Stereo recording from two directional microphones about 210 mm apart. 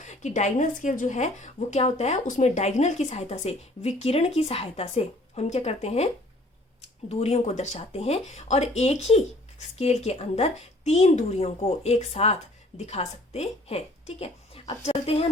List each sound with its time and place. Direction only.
0.0 s speech: 35° left (ahead or behind)